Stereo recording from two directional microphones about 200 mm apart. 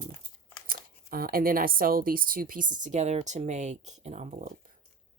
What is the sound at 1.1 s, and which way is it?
A woman's voice, 45° right (ahead or behind).